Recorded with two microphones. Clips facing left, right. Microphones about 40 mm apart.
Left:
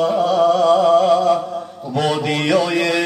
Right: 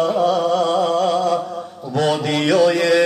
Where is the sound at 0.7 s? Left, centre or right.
Left.